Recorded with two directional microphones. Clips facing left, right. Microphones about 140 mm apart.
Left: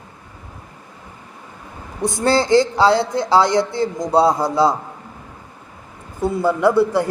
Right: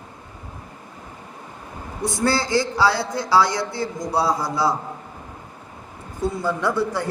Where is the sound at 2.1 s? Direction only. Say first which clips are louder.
Left 6 dB; 20° left (ahead or behind).